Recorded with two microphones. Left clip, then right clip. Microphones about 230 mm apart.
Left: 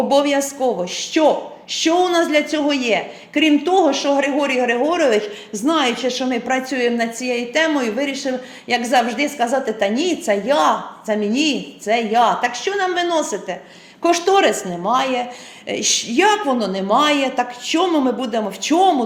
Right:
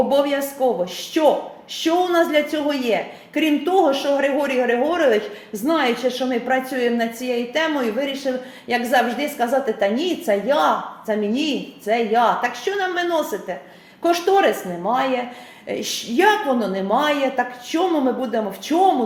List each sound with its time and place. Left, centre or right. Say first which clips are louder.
0.1 s a woman's voice: left 3 dB; left